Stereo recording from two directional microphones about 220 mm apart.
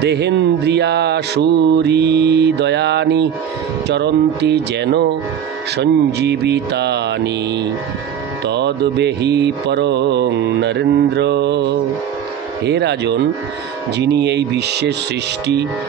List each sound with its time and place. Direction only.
0.0 s mantra: 50° right (ahead or behind)
8.5 s mantra: 50° right (ahead or behind)